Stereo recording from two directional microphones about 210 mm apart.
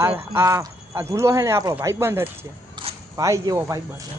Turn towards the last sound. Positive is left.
turn(degrees=-15)  # may be behind; listen again after turning